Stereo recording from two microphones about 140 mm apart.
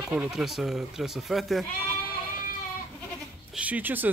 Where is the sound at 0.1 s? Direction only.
5° right (ahead or behind).